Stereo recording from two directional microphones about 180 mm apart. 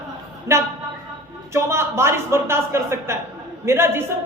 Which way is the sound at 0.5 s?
15° right (ahead or behind).